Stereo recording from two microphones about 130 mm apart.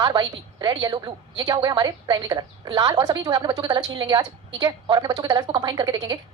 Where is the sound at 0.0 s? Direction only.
35° right (ahead or behind).